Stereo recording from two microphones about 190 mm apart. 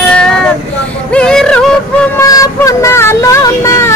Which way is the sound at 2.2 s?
15° left (ahead or behind).